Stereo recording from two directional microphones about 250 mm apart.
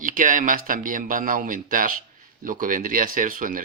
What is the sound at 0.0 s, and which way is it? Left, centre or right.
Speech, right.